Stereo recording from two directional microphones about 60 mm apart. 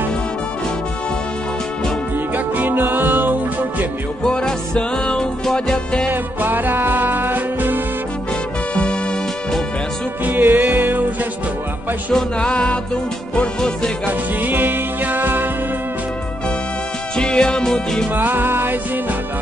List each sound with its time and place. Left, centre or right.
2.3 s music: right
4.2 s music: centre
6.4 s music: right
10.2 s music: right
12.1 s music: centre
14.4 s music: right
17.2 s music: centre
18.1 s music: right